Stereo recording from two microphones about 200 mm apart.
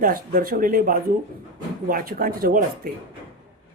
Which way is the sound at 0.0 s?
45° right (ahead or behind).